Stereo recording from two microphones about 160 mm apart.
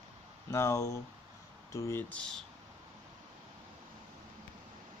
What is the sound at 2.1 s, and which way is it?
Speech, 5° left (ahead or behind).